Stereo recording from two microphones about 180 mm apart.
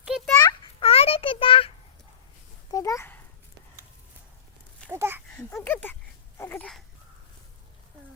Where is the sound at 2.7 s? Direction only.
20° left (ahead or behind).